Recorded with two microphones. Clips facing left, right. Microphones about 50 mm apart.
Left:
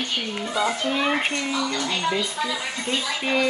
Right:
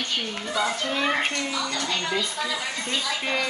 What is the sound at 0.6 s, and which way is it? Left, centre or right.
A child's voice, centre.